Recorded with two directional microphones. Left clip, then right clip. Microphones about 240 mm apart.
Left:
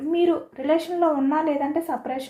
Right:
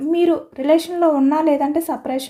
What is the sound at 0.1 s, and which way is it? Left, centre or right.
Speech, right.